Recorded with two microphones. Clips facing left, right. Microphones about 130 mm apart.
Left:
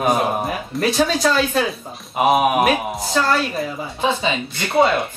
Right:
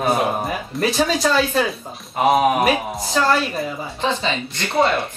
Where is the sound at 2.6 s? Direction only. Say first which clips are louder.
Left 1 dB; centre (ahead or behind).